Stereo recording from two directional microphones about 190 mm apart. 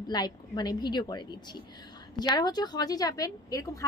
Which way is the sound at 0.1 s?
20° left (ahead or behind).